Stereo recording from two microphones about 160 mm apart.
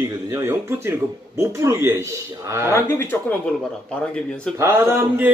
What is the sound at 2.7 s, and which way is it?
Speech, 15° left (ahead or behind).